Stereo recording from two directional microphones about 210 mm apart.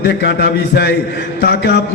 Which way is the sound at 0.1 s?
50° left (ahead or behind).